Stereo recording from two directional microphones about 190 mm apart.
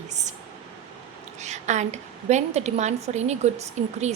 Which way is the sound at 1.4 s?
40° right (ahead or behind).